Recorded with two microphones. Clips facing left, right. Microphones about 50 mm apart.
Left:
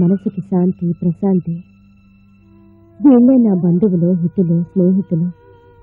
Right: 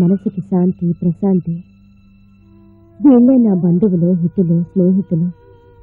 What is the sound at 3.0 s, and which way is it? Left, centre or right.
Speech, centre.